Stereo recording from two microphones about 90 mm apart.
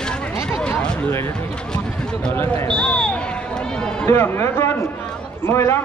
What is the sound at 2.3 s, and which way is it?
Speech, 25° left (ahead or behind).